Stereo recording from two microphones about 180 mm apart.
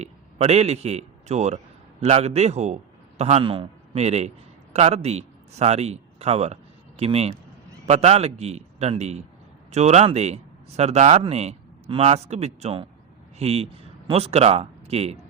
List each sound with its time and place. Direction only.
0.0 s a man's voice: 35° right (ahead or behind)